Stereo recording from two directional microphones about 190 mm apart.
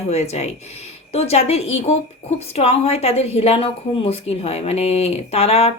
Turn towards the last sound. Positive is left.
turn(degrees=30)  # may be behind; listen again after turning